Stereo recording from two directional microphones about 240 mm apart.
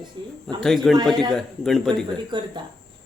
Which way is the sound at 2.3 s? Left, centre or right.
Centre.